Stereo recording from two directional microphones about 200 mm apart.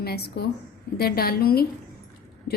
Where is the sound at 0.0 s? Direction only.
55° left (ahead or behind).